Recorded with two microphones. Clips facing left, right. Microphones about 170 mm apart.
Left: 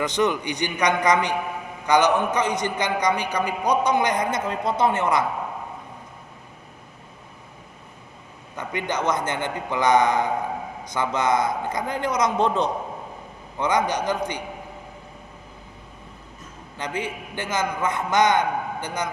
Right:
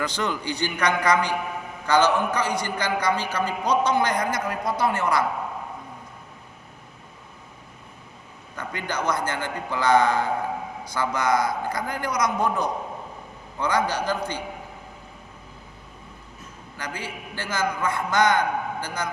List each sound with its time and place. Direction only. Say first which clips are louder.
0.0 s a man's voice: left 5 dB; 20° left (ahead or behind)
8.5 s a man's voice: left 3 dB; 20° left (ahead or behind)
16.7 s a man's voice: left 5 dB; 20° left (ahead or behind)